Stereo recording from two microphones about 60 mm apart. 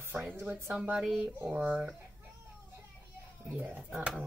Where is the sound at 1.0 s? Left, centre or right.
Centre.